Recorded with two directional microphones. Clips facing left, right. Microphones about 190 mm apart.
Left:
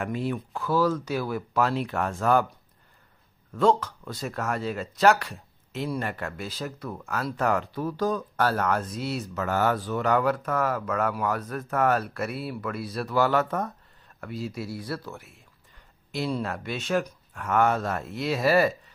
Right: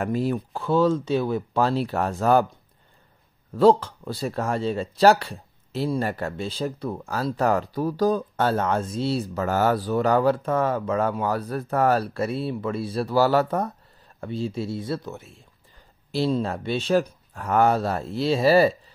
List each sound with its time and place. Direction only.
0.0 s speech: 40° right (ahead or behind)
3.5 s speech: 30° right (ahead or behind)